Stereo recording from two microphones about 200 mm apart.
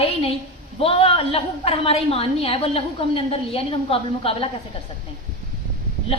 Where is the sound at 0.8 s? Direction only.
30° left (ahead or behind).